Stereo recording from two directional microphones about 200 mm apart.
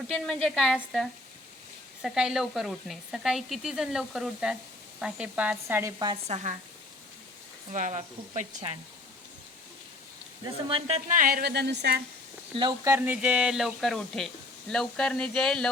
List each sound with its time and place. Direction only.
0.4 s speech: centre (ahead or behind); by 6.1 s 15° right (ahead or behind)
6.2 s speech: 35° right (ahead or behind)
7.7 s speech: 35° right (ahead or behind)
10.4 s speech: 25° right (ahead or behind); by 12.0 s 55° right (ahead or behind)
12.5 s speech: 20° right (ahead or behind); by 15.7 s 5° left (ahead or behind)